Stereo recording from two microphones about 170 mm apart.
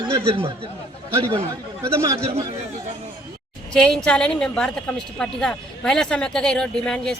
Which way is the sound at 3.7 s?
5° left (ahead or behind).